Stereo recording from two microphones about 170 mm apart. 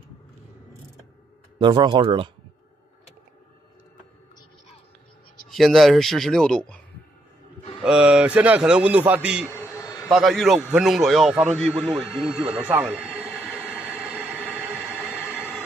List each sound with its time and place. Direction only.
1.6 s speech: 30° right (ahead or behind)
5.5 s a man's voice: centre (ahead or behind)
7.8 s a man's voice: 5° right (ahead or behind)
9.5 s a sound: 15° left (ahead or behind)
10.0 s a man's voice: centre (ahead or behind)
13.4 s train: 5° right (ahead or behind)